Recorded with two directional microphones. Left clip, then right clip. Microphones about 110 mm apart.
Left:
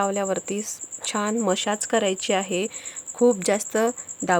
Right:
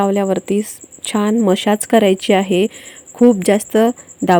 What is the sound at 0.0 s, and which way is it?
A woman's voice, 25° right (ahead or behind).